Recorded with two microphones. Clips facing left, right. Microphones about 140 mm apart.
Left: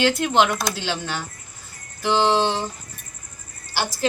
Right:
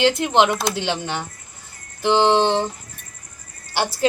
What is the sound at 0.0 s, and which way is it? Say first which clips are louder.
A woman's voice: right 2 dB; 20° right (ahead or behind).